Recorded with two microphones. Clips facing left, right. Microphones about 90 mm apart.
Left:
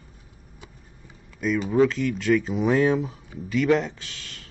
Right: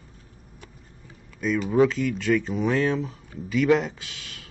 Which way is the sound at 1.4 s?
Centre (ahead or behind).